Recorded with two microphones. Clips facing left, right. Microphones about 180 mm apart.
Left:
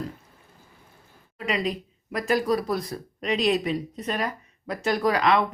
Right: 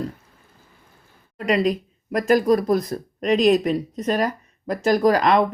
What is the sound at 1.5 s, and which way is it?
Speech, 45° right (ahead or behind).